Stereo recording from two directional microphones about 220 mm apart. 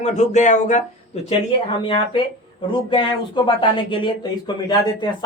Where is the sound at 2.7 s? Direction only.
20° left (ahead or behind).